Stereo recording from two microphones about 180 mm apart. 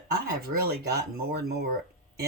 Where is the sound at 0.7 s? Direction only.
60° right (ahead or behind).